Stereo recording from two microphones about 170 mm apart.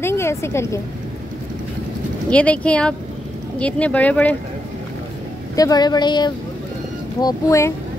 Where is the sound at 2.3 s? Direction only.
5° left (ahead or behind).